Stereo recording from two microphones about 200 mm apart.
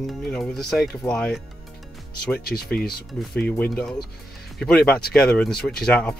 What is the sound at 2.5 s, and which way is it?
Speech, 50° left (ahead or behind).